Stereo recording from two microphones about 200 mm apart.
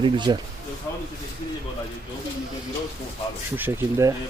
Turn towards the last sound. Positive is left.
turn(degrees=-15)  # may be behind; listen again after turning